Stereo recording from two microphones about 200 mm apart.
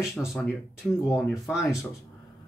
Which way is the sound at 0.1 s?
Centre (ahead or behind).